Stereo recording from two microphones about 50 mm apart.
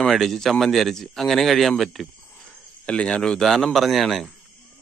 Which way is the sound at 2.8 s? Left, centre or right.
Left.